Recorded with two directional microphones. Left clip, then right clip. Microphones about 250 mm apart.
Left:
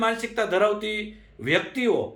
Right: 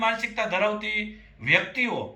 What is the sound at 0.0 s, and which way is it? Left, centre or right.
A man's voice, centre.